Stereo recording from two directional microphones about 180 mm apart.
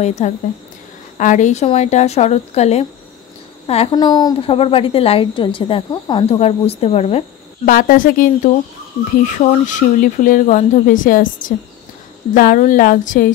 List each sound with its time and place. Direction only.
0.0 s a woman's voice: 40° left (ahead or behind)
3.9 s a woman's voice: 20° left (ahead or behind)
7.6 s speech: 50° left (ahead or behind)